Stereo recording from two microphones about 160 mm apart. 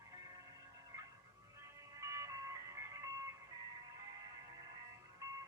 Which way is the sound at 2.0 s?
20° right (ahead or behind).